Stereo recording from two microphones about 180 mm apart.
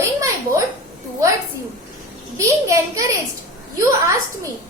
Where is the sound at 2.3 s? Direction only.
15° right (ahead or behind).